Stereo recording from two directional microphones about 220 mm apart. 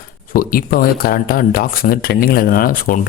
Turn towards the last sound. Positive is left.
turn(degrees=40)  # may be behind; listen again after turning